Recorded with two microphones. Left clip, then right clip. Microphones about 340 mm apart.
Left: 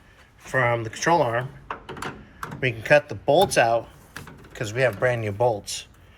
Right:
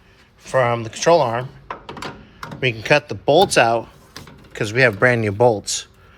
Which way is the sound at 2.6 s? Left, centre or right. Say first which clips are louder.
Right 2 dB; centre.